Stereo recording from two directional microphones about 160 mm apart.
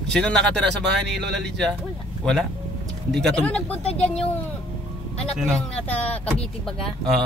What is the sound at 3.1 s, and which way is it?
Speech, 5° left (ahead or behind).